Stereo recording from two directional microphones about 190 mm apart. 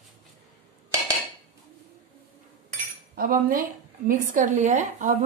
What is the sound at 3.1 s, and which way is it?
A woman's voice, 50° right (ahead or behind).